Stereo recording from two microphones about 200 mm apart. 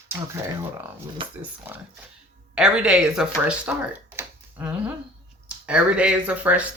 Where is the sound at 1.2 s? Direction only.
25° right (ahead or behind).